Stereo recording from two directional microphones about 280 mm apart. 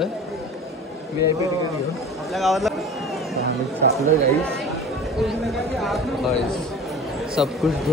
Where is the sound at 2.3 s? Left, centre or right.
Centre.